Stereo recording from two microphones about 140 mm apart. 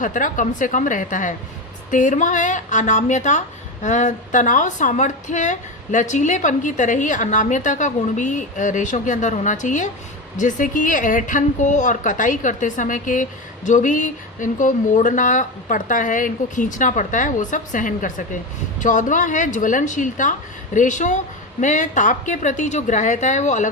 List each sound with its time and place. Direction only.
0.0 s a woman's voice: 70° left (ahead or behind)